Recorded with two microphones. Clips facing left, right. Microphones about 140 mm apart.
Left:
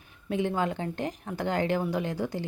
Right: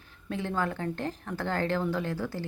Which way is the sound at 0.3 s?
15° left (ahead or behind).